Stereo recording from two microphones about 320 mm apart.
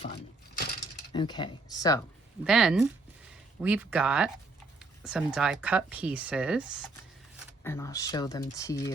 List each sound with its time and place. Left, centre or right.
0.0 s a sound: left
1.1 s speech: centre
2.4 s speech: centre
7.6 s speech: centre